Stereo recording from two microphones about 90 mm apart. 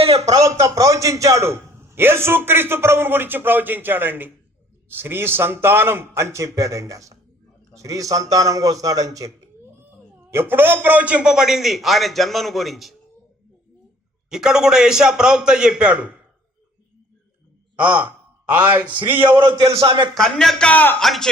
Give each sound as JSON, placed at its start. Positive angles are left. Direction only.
{"t": 0.3, "sound": "a man's voice", "side_deg": -35}
{"t": 10.3, "sound": "a man's voice", "side_deg": -25}
{"t": 14.3, "sound": "a man's voice", "side_deg": -5}
{"t": 17.7, "sound": "a man's voice", "side_deg": -15}
{"t": 19.7, "sound": "a man's voice", "side_deg": -90}
{"t": 20.1, "sound": "a man's voice", "side_deg": 5}
{"t": 21.0, "sound": "a man's voice", "side_deg": 5}